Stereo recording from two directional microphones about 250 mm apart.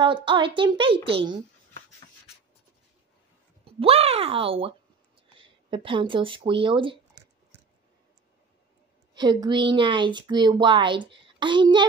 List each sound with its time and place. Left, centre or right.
0.0 s a woman's voice: centre
3.6 s a woman's voice: right
9.1 s a woman's voice: centre